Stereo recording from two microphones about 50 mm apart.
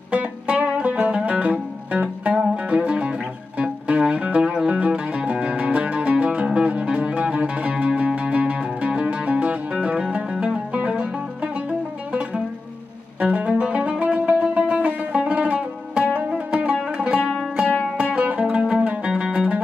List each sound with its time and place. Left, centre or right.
0.1 s music: right
13.2 s music: right